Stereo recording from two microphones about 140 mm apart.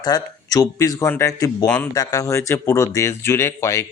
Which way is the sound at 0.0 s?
25° left (ahead or behind).